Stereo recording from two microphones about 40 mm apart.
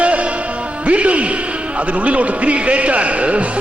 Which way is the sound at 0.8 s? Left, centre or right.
Right.